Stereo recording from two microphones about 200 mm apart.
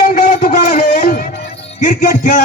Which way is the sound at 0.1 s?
40° left (ahead or behind).